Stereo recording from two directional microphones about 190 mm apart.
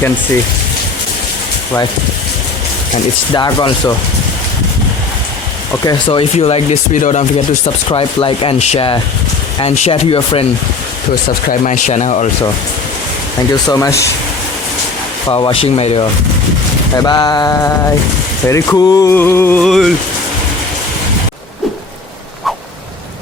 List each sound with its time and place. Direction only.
3.3 s speech: 25° left (ahead or behind)
5.8 s speech: 25° left (ahead or behind); by 7.3 s 40° left (ahead or behind)
7.9 s speech: 30° left (ahead or behind)
11.6 s speech: 40° left (ahead or behind)
13.5 s a sound: 20° left (ahead or behind)
15.3 s speech: 25° left (ahead or behind)
18.4 s a sound: 15° left (ahead or behind)
19.6 s speech: centre (ahead or behind)